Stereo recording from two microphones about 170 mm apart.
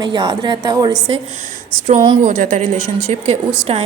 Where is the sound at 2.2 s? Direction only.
45° right (ahead or behind).